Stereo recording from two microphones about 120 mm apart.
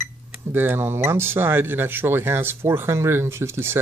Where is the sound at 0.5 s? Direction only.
15° right (ahead or behind).